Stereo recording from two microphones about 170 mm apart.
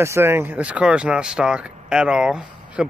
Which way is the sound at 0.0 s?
15° right (ahead or behind).